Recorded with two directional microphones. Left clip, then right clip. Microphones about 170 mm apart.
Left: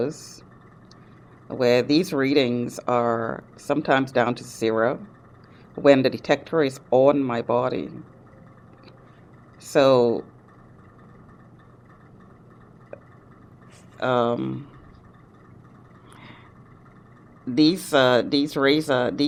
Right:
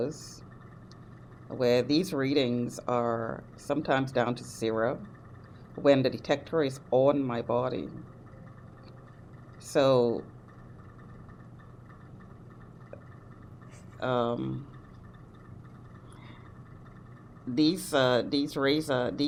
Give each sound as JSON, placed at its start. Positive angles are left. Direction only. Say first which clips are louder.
{"t": 0.0, "sound": "speech", "louder": "left 6 dB", "side_deg": 25}
{"t": 1.5, "sound": "speech", "louder": "left 6 dB", "side_deg": 25}
{"t": 9.6, "sound": "speech", "louder": "left 7 dB", "side_deg": 25}
{"t": 14.0, "sound": "speech", "louder": "left 7 dB", "side_deg": 25}
{"t": 17.5, "sound": "speech", "louder": "left 7 dB", "side_deg": 25}